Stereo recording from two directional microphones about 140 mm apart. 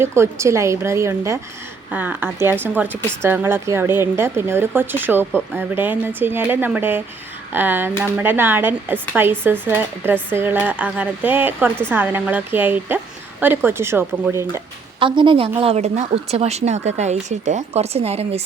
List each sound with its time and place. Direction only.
0.0 s a woman's voice: 20° right (ahead or behind)
14.9 s a woman's voice: 35° right (ahead or behind)
15.6 s speech: 50° right (ahead or behind)